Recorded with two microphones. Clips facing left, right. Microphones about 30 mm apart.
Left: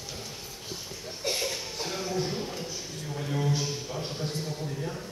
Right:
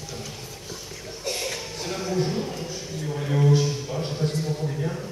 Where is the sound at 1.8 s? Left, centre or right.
Centre.